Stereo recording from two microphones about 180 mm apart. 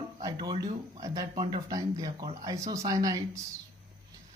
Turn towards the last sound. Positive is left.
turn(degrees=-20)  # may be behind; listen again after turning